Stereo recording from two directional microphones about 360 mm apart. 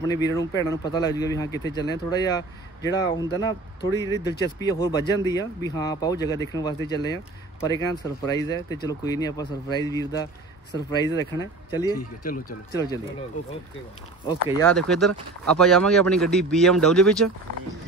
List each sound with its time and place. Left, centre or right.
0.0 s speech: centre
12.2 s speech: left
12.7 s speech: centre
14.6 s speech: centre